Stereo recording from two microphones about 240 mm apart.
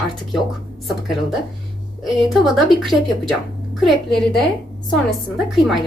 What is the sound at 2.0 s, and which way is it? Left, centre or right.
A woman's voice, centre.